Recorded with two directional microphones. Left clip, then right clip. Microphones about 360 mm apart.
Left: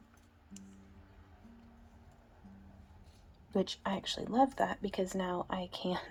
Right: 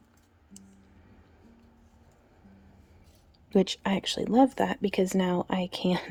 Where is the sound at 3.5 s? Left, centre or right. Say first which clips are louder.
Right 8 dB; right.